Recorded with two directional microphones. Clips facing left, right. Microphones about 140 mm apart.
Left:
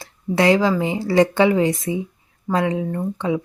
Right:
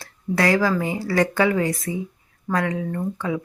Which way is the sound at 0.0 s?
20° left (ahead or behind).